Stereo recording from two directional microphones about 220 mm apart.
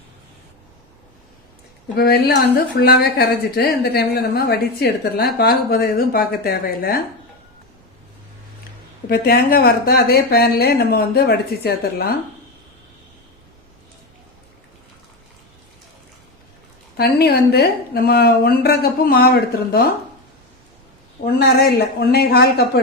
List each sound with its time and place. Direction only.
2.0 s a woman's voice: 45° left (ahead or behind)
9.0 s a woman's voice: 45° left (ahead or behind)
17.0 s a woman's voice: 45° left (ahead or behind)
21.4 s a woman's voice: 45° left (ahead or behind)